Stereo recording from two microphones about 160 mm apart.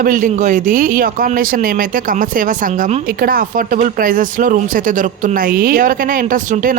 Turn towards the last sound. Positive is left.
turn(degrees=-55)  # may be behind; listen again after turning